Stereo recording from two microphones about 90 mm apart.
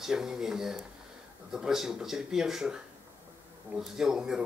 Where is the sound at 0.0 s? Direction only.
5° right (ahead or behind).